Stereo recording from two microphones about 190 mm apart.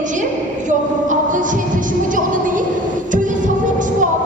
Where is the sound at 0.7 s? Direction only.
40° right (ahead or behind).